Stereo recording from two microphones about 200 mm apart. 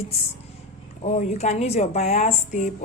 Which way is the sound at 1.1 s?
35° left (ahead or behind).